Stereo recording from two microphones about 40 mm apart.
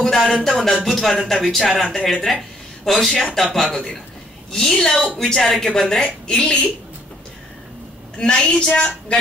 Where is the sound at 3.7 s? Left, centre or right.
Left.